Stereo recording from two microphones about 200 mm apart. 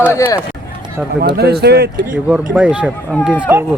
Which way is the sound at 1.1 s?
55° right (ahead or behind).